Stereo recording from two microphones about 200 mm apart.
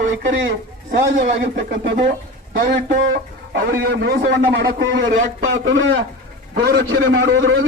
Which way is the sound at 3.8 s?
55° right (ahead or behind).